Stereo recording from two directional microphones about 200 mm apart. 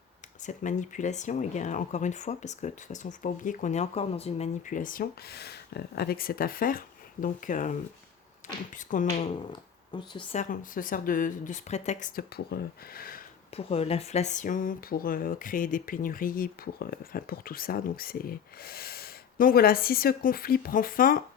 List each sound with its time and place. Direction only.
0.4 s speech: 40° left (ahead or behind)
9.1 s speech: 25° left (ahead or behind)
10.3 s speech: 40° left (ahead or behind)
13.6 s speech: 30° left (ahead or behind)